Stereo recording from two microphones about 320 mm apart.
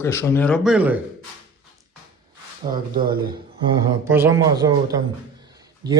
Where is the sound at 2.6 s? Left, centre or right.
Centre.